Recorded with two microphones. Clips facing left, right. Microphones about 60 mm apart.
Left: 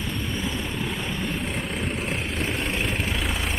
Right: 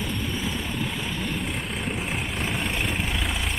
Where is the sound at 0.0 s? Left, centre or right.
Centre.